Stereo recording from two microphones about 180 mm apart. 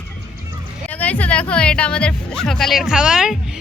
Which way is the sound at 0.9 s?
10° left (ahead or behind).